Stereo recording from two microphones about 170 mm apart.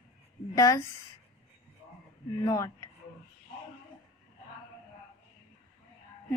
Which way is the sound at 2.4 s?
20° left (ahead or behind).